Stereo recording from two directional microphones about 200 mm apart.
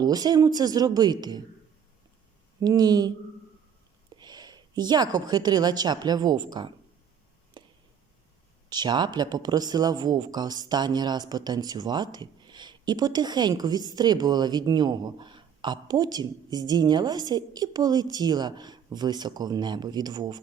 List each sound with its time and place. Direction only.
0.0 s speech: 20° right (ahead or behind)
2.6 s speech: 20° right (ahead or behind)
4.2 s a woman's voice: 20° right (ahead or behind)
7.6 s a sound: 20° right (ahead or behind)
8.7 s speech: 20° right (ahead or behind)